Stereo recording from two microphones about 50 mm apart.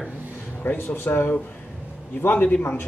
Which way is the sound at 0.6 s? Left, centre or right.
Left.